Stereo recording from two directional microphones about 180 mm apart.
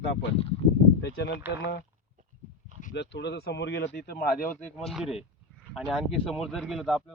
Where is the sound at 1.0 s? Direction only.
65° left (ahead or behind).